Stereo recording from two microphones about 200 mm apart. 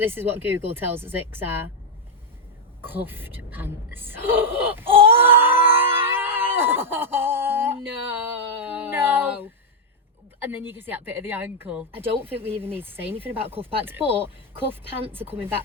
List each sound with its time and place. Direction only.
0.0 s speech: 10° right (ahead or behind)
2.8 s a sound: 10° right (ahead or behind)
10.5 s speech: 10° right (ahead or behind)
13.5 s speech: 30° right (ahead or behind)
15.1 s speech: 10° right (ahead or behind)